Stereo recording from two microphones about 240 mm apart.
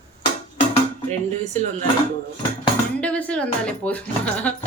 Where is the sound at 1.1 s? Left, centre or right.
Right.